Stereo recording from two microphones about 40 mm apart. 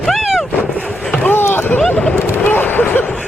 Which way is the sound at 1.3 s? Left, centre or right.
Left.